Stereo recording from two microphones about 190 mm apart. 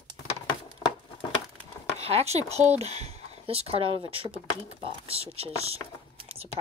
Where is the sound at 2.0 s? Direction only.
35° right (ahead or behind).